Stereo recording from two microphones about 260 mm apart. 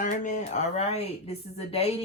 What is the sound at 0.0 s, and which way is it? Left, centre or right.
A woman's voice, left.